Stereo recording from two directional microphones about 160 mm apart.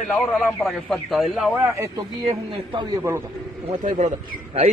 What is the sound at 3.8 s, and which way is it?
Speech, 50° right (ahead or behind).